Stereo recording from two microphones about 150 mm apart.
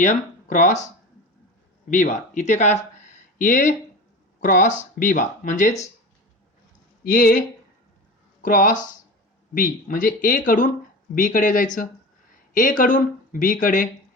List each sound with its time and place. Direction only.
0.0 s speech: 55° left (ahead or behind)
1.9 s speech: 55° left (ahead or behind)
7.0 s speech: 70° left (ahead or behind)